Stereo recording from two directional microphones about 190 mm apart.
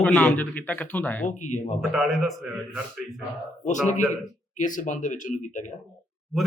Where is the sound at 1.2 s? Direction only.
40° left (ahead or behind).